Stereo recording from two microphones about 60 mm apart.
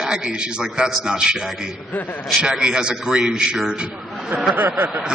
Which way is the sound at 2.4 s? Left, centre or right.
Centre.